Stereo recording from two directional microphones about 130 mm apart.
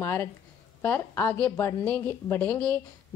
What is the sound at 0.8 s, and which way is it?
A woman's voice, 15° left (ahead or behind).